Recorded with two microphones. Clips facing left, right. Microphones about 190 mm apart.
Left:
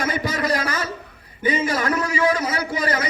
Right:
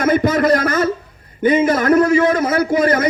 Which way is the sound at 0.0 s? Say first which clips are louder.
Right 9 dB; 50° right (ahead or behind).